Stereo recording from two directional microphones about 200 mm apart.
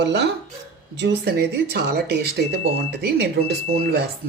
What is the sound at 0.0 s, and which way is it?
Speech, 60° right (ahead or behind).